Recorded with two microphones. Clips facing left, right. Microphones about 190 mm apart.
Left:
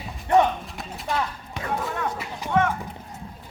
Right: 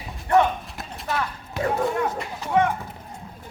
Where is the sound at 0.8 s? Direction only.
Centre (ahead or behind).